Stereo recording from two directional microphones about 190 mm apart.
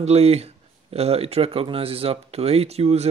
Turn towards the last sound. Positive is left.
turn(degrees=-35)  # may be behind; listen again after turning